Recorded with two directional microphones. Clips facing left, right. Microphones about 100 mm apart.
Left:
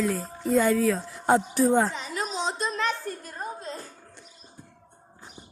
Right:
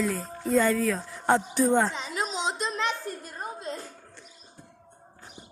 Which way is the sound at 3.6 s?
35° left (ahead or behind).